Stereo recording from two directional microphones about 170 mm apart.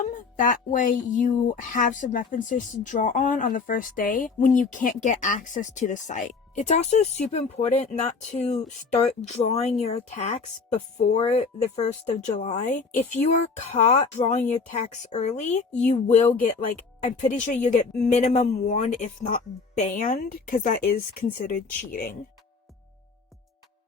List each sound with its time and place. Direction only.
0.0 s speech: 50° left (ahead or behind)